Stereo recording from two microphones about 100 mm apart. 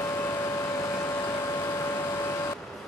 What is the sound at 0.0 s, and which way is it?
Vehicle, 25° left (ahead or behind).